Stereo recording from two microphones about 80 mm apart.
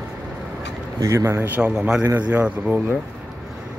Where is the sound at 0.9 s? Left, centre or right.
Right.